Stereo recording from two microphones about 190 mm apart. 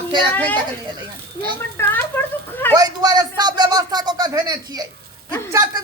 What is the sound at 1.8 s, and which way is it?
Speech, 10° left (ahead or behind).